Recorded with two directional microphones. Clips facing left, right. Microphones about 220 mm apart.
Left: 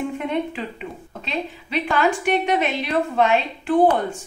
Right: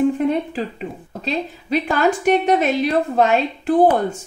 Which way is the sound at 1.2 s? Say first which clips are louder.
Right 4 dB; 40° right (ahead or behind).